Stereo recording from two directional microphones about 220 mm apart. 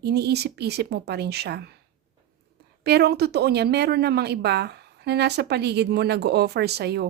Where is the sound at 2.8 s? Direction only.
45° right (ahead or behind).